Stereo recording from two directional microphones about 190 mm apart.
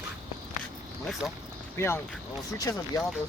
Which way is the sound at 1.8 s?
15° left (ahead or behind).